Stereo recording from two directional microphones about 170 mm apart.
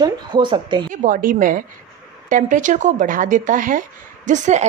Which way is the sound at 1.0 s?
50° right (ahead or behind).